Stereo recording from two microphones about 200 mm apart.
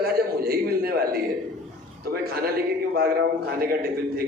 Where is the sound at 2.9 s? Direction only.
50° right (ahead or behind).